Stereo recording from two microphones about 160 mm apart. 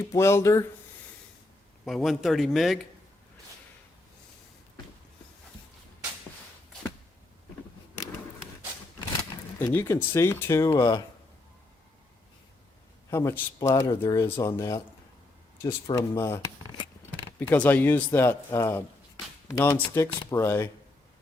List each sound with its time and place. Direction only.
0.0 s speech: 15° left (ahead or behind)
1.8 s speech: centre (ahead or behind)
9.6 s speech: 15° left (ahead or behind)
13.1 s speech: 15° left (ahead or behind)